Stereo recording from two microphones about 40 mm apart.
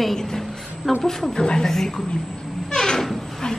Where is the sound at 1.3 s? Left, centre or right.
Centre.